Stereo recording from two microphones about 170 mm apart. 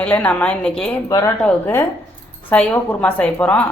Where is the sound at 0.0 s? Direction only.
10° left (ahead or behind).